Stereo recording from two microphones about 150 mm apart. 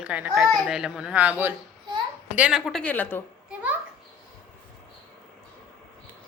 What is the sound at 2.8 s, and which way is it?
Speech, 10° left (ahead or behind).